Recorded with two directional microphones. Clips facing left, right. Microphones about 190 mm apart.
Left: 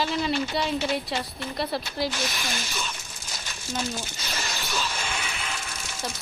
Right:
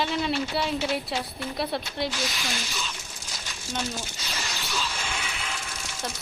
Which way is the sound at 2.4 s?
50° left (ahead or behind).